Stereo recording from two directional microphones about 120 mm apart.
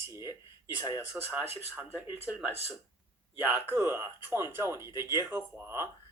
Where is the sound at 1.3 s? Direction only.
15° right (ahead or behind).